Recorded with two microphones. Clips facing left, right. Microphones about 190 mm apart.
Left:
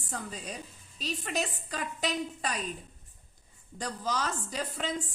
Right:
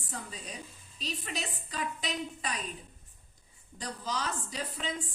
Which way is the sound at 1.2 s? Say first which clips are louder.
Left 5 dB; 45° left (ahead or behind).